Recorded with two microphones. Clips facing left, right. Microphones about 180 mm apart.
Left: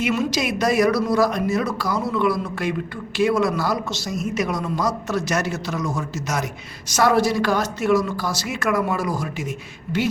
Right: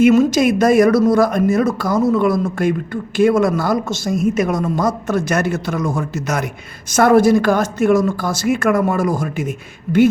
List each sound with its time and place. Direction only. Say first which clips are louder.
0.0 s a man's voice: right 10 dB; 45° right (ahead or behind)